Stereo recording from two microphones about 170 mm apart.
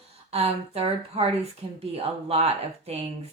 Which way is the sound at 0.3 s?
35° right (ahead or behind).